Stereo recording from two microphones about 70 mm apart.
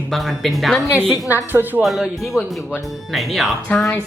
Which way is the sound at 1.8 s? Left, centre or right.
Centre.